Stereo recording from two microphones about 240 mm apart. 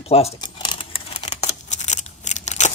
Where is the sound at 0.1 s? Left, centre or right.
Left.